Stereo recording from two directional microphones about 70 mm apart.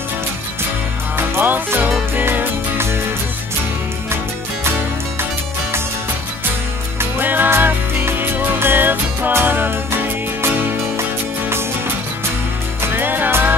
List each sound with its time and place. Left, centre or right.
1.1 s music: right
7.0 s music: right
12.8 s music: right